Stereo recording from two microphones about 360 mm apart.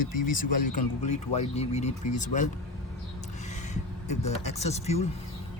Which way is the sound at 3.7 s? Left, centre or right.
Centre.